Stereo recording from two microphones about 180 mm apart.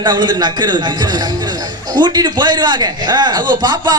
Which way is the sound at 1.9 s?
25° right (ahead or behind).